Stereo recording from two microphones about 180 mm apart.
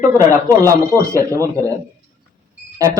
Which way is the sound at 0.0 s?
20° right (ahead or behind).